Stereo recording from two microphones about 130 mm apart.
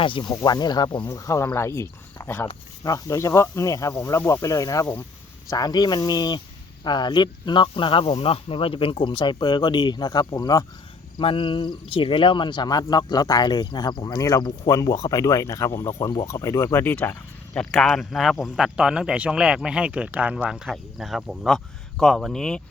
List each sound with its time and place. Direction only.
0.0 s speech: 40° left (ahead or behind)
11.2 s speech: 40° left (ahead or behind); by 22.6 s 5° left (ahead or behind)